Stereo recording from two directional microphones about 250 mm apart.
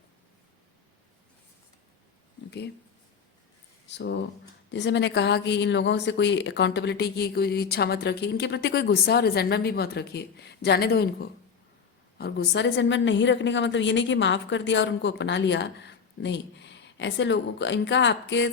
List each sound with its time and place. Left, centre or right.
3.8 s a woman's voice: left